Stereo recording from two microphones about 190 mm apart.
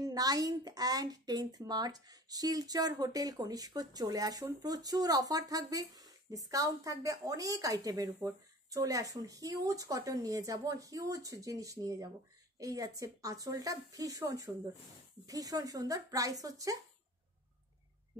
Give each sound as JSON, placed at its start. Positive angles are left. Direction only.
{"t": 0.0, "sound": "a woman's voice", "side_deg": -20}